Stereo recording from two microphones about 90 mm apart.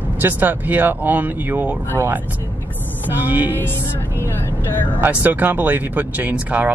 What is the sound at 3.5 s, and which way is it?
Speech, 25° left (ahead or behind).